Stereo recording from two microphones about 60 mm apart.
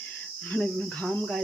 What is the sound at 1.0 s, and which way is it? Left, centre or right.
Speech, left.